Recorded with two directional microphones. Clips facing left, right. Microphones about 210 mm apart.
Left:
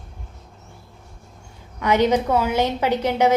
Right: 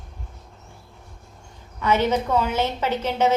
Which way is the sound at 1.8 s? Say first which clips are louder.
Left 3 dB; 15° left (ahead or behind).